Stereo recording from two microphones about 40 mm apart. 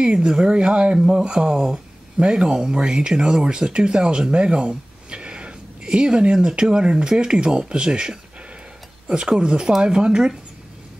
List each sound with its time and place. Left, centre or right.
0.0 s speech: right
2.1 s speech: right
9.3 s speech: centre